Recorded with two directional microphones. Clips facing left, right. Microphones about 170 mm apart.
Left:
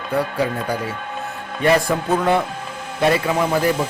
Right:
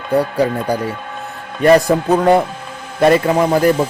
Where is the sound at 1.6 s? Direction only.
40° right (ahead or behind).